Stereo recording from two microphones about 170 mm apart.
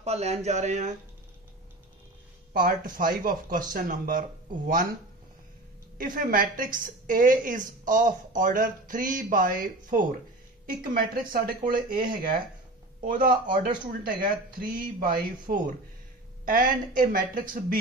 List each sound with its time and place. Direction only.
0.0 s speech: 40° right (ahead or behind)
2.5 s speech: 55° right (ahead or behind)
5.9 s speech: 55° right (ahead or behind)